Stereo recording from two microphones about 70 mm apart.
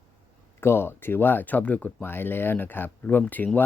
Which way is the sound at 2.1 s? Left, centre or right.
Left.